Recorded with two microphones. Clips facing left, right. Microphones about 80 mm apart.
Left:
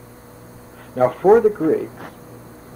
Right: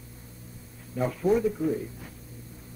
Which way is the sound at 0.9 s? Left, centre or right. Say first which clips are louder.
Left 12 dB; left.